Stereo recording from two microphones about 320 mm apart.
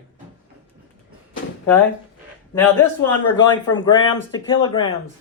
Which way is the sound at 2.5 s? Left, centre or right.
Centre.